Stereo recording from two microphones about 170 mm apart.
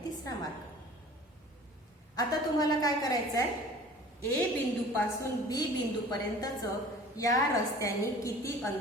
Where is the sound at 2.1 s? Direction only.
20° left (ahead or behind).